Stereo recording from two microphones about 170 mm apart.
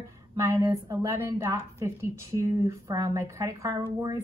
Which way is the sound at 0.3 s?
20° right (ahead or behind).